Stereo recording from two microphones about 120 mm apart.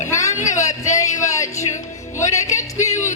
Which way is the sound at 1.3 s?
25° left (ahead or behind).